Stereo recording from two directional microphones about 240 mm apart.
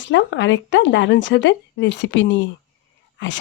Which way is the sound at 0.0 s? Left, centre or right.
Left.